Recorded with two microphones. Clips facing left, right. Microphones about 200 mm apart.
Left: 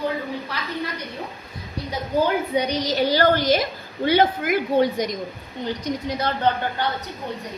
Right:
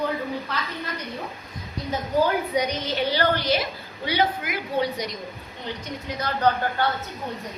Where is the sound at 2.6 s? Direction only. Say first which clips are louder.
Left 3 dB; 35° left (ahead or behind).